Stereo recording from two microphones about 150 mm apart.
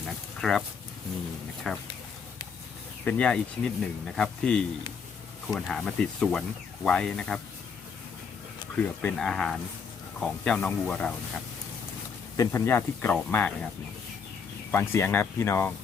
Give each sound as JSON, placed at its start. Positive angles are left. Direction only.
{"t": 0.4, "sound": "speech", "side_deg": 0}
{"t": 1.7, "sound": "speech", "side_deg": 5}
{"t": 3.0, "sound": "speech", "side_deg": 10}
{"t": 8.7, "sound": "speech", "side_deg": 10}
{"t": 12.4, "sound": "speech", "side_deg": 15}
{"t": 14.7, "sound": "speech", "side_deg": 15}